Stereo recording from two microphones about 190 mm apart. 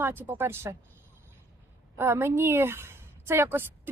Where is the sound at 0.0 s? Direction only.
10° right (ahead or behind).